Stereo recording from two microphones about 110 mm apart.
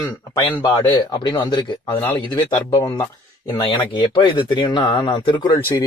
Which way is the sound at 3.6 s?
50° left (ahead or behind).